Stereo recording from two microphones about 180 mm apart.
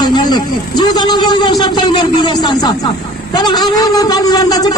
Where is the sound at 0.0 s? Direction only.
25° left (ahead or behind).